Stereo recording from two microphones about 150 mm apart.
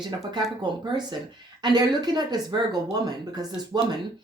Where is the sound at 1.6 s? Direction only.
25° right (ahead or behind).